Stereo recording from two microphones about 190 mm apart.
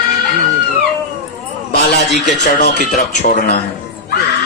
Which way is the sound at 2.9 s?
40° left (ahead or behind).